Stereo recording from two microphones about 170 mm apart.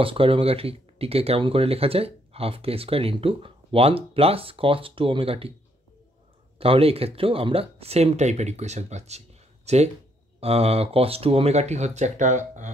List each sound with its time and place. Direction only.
0.0 s speech: 30° right (ahead or behind)
6.6 s speech: 35° right (ahead or behind)